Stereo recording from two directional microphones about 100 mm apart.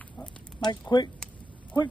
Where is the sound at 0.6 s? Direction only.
50° left (ahead or behind).